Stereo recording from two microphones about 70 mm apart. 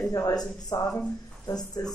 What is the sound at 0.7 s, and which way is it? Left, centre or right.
Speech, left.